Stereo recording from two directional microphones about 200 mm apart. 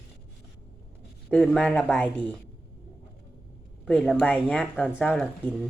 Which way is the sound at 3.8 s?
5° left (ahead or behind).